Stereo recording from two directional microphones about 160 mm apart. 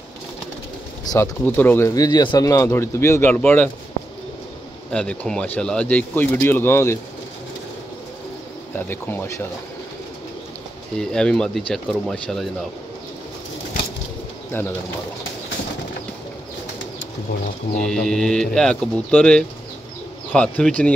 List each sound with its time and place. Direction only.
1.0 s speech: 20° left (ahead or behind)
2.0 s speech: 25° left (ahead or behind)
4.9 s speech: 5° left (ahead or behind)
8.7 s speech: 10° left (ahead or behind)
11.0 s speech: 5° left (ahead or behind)
17.8 s speech: 5° left (ahead or behind)